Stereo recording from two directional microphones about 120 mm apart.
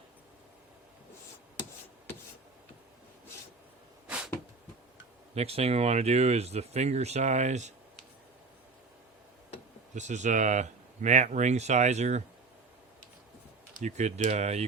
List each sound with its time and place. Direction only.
4.0 s a sound: 10° right (ahead or behind)
5.3 s speech: 60° right (ahead or behind); by 7.7 s 75° right (ahead or behind)
9.9 s speech: 80° right
13.7 s speech: 75° right (ahead or behind)